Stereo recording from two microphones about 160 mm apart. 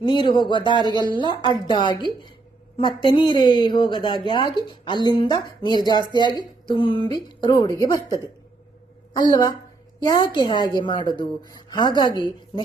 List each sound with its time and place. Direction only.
0.0 s a woman's voice: 30° left (ahead or behind)
9.3 s a woman's voice: 25° left (ahead or behind)